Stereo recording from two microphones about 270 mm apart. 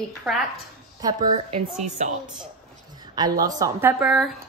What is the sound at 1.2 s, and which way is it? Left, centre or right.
Speech, right.